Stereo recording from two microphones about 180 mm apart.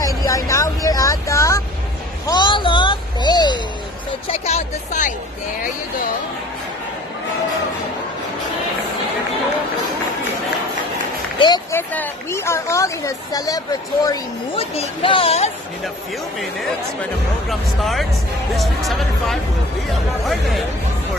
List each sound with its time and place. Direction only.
0.0 s vehicle: 20° left (ahead or behind)
2.2 s a sound: 25° left (ahead or behind)
4.3 s speech: 35° left (ahead or behind)
11.3 s speech: 25° left (ahead or behind)
11.7 s speech: 10° left (ahead or behind)
14.6 s speech: 30° left (ahead or behind)
17.5 s speech: centre (ahead or behind)